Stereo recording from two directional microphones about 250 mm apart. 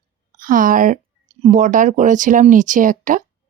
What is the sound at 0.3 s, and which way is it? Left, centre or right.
Speech, right.